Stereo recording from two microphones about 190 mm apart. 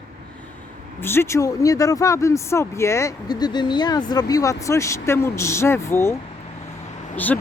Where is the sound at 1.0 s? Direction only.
15° left (ahead or behind).